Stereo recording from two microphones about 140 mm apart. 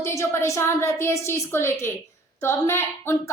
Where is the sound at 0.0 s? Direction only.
20° left (ahead or behind).